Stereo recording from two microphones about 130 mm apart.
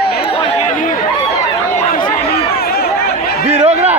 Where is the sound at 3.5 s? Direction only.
55° right (ahead or behind).